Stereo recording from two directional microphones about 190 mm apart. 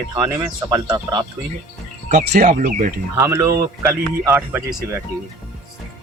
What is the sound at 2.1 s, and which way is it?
Speech, 45° right (ahead or behind).